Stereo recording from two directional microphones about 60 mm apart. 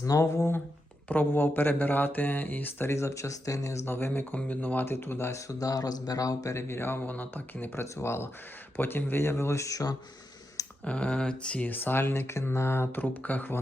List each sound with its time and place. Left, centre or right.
0.0 s speech: left
1.0 s speech: left
2.9 s speech: left
3.8 s speech: left
5.5 s speech: left
7.1 s speech: left
7.8 s speech: left
10.8 s speech: centre
11.7 s speech: left